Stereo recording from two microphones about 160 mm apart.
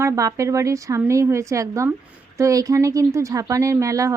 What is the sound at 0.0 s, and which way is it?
Speech, 20° right (ahead or behind).